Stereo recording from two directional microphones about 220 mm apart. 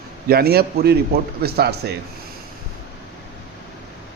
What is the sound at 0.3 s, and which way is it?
Speech, 45° right (ahead or behind).